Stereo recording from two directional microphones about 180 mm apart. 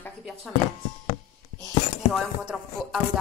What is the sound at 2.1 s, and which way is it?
Speech, centre (ahead or behind).